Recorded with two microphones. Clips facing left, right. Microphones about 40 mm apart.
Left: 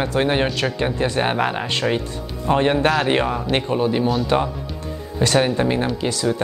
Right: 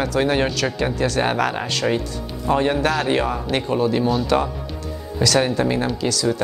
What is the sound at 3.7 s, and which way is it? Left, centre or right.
Speech, centre.